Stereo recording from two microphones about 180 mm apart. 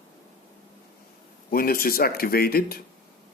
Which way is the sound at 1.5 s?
55° left (ahead or behind).